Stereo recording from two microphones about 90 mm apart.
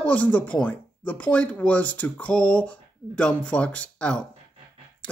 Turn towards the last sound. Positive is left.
turn(degrees=15)  # may be behind; listen again after turning